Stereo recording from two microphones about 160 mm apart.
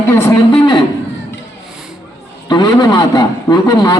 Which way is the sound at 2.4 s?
25° left (ahead or behind).